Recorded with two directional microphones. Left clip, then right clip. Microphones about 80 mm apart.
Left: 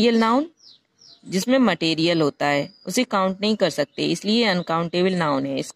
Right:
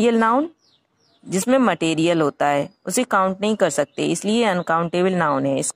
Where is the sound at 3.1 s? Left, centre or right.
Centre.